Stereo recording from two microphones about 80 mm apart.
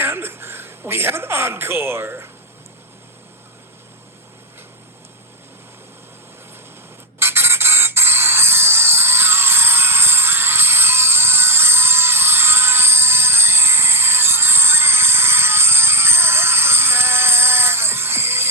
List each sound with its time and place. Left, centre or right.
0.0 s speech: right
7.2 s music: right